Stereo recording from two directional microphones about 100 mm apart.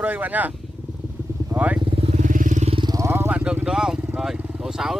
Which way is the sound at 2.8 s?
40° right (ahead or behind).